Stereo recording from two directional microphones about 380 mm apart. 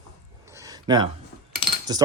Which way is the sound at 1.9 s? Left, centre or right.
Centre.